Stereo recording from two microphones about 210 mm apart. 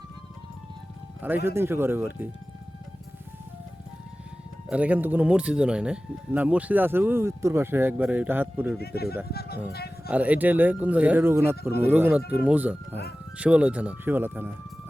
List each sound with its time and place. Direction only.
1.5 s speech: 10° right (ahead or behind)
4.7 s speech: 5° right (ahead or behind)
8.8 s speech: 50° left (ahead or behind)
10.1 s speech: 5° right (ahead or behind)